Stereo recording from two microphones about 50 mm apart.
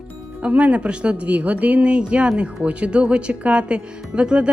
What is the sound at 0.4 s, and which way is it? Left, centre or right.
Speech, right.